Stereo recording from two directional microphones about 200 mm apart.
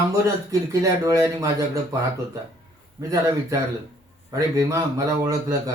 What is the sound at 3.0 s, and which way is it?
A man's voice, 15° right (ahead or behind).